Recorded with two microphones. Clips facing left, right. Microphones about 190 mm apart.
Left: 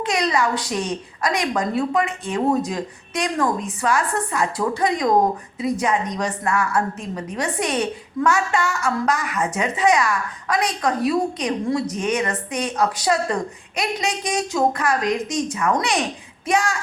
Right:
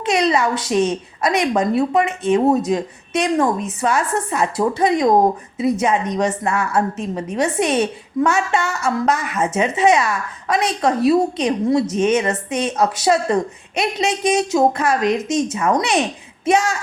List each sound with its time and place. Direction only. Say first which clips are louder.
0.0 s a woman's voice: right 4 dB; 25° right (ahead or behind)